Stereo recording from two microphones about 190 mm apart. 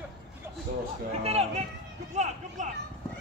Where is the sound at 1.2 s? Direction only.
35° right (ahead or behind).